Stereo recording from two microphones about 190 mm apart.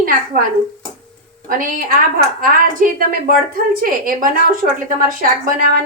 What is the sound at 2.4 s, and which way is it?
A woman's voice, 45° right (ahead or behind).